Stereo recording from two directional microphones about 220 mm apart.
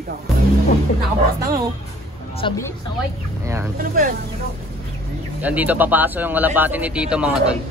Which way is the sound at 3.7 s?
40° right (ahead or behind).